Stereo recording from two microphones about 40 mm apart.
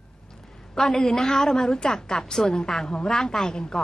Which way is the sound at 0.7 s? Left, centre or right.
Centre.